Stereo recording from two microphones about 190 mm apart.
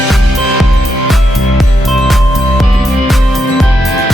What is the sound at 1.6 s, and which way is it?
Music, centre (ahead or behind).